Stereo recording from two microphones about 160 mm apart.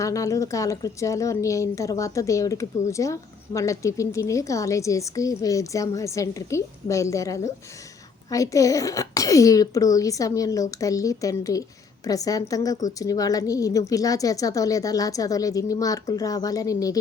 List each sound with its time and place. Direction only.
0.0 s a woman's voice: 20° left (ahead or behind)